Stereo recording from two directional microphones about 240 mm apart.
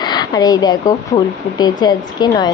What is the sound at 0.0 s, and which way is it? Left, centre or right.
A woman's voice, centre.